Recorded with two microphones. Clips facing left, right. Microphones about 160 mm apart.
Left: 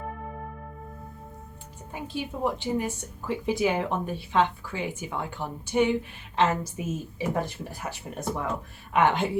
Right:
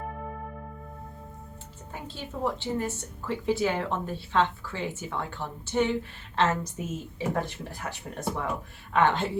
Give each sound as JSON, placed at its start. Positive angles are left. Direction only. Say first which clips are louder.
{"t": 1.9, "sound": "a woman's voice", "louder": "left 5 dB", "side_deg": 15}
{"t": 8.0, "sound": "speech", "louder": "left 1 dB", "side_deg": 0}
{"t": 8.9, "sound": "a woman's voice", "louder": "left 1 dB", "side_deg": 15}